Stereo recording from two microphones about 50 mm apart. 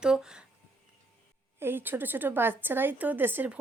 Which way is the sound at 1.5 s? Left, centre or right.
Right.